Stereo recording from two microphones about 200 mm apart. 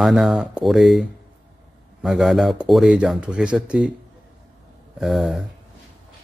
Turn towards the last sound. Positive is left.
turn(degrees=0)  # may be behind; listen again after turning